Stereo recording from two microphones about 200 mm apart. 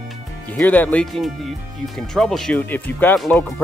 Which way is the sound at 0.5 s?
10° left (ahead or behind).